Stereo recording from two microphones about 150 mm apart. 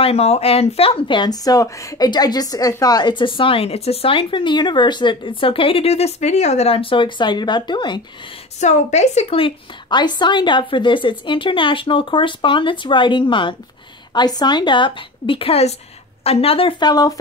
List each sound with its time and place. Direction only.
0.0 s speech: 45° left (ahead or behind)
8.5 s speech: 50° left (ahead or behind); by 17.1 s 25° left (ahead or behind)